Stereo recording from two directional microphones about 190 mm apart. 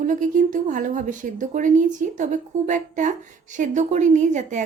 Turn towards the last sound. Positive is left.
turn(degrees=-40)  # may be behind; listen again after turning